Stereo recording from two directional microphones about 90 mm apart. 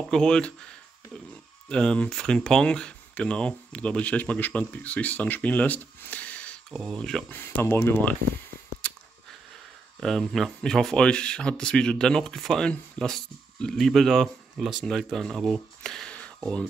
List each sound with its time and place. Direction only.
0.1 s speech: 5° left (ahead or behind)
1.7 s speech: 10° left (ahead or behind)
6.7 s speech: 5° left (ahead or behind)
7.2 s speech: 25° left (ahead or behind)
8.8 s a sound: 10° left (ahead or behind)
9.9 s speech: 5° left (ahead or behind)